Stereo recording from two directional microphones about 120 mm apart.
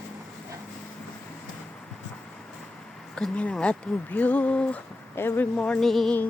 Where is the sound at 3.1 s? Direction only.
10° left (ahead or behind).